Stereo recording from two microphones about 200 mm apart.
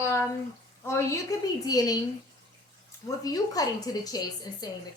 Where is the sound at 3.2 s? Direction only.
20° left (ahead or behind).